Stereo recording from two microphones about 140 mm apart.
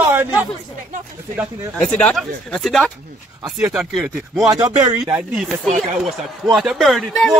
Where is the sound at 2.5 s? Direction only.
Centre (ahead or behind).